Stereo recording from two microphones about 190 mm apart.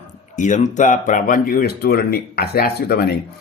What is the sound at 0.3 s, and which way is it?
A man's voice, 40° left (ahead or behind).